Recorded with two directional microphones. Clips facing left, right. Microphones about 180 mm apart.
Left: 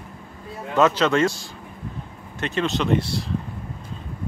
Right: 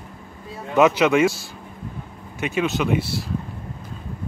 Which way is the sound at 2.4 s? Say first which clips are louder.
Right 1 dB; 10° right (ahead or behind).